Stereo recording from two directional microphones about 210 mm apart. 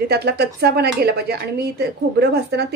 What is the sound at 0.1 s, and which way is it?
Speech, 50° right (ahead or behind).